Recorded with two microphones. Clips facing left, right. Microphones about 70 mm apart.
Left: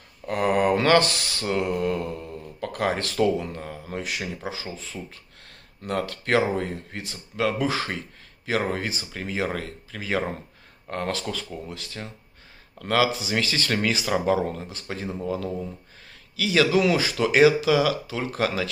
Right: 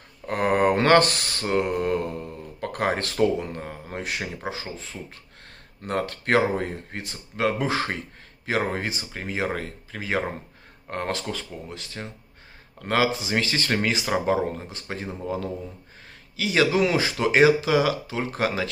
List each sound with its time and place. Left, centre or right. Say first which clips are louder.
0.3 s speech: even; right